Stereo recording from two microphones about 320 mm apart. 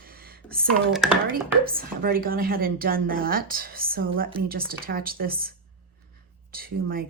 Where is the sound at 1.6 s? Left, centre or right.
Right.